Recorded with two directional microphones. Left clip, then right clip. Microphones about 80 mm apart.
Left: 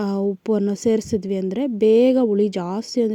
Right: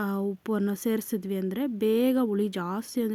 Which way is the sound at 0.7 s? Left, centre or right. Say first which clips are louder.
Left 10 dB; left.